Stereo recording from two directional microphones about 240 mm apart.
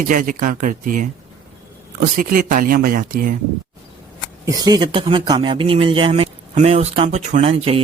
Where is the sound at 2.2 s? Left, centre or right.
Right.